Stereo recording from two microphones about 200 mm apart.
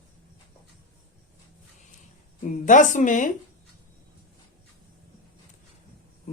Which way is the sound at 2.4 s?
40° left (ahead or behind).